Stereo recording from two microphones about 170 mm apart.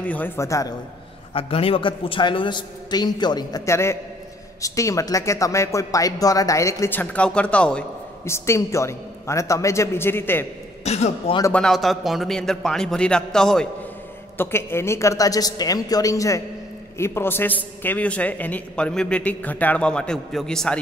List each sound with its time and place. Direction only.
0.0 s a man's voice: 10° left (ahead or behind)
1.3 s speech: 35° left (ahead or behind); by 7.8 s 5° left (ahead or behind)
8.3 s a man's voice: 15° left (ahead or behind)
10.8 s speech: 40° left (ahead or behind)
11.5 s a man's voice: centre (ahead or behind)